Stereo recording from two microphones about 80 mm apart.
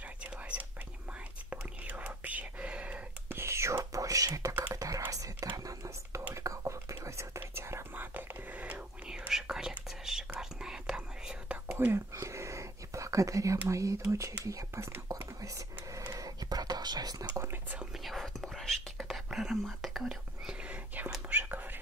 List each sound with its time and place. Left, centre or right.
0.2 s whispering: centre
3.3 s whispering: right; by 11.5 s centre
11.6 s whispering: right
12.2 s whispering: right
13.7 s speech: right
15.4 s whispering: right
17.4 s whispering: right
18.0 s whispering: centre
20.6 s whispering: right